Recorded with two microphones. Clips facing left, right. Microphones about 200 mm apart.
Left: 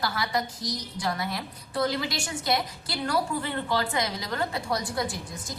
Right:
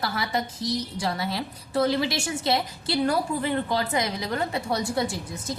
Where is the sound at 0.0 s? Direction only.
25° right (ahead or behind).